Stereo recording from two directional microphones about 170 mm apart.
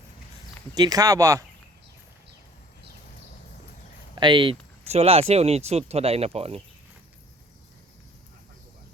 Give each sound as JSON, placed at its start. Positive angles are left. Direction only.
{"t": 0.7, "sound": "speech", "side_deg": -20}
{"t": 4.1, "sound": "speech", "side_deg": -25}